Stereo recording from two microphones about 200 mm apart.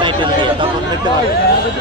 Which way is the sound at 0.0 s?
25° right (ahead or behind).